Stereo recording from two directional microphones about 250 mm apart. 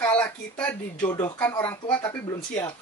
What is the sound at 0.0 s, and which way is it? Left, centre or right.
Speech, centre.